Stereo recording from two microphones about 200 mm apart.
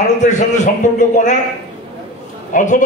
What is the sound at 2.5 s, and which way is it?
Speech, 40° left (ahead or behind).